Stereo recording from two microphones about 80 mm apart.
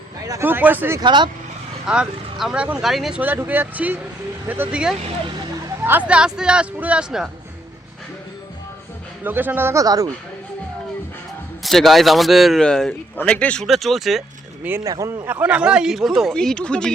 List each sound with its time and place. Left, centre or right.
0.4 s speech: right
1.0 s speech: right
1.9 s a man's voice: centre
3.2 s speech: right
4.7 s speech: centre
5.8 s speech: right
6.1 s speech: centre
9.2 s speech: right
9.7 s a man's voice: right
11.6 s a man's voice: centre
13.7 s a man's voice: centre
14.8 s a man's voice: right
15.3 s speech: centre
16.3 s speech: centre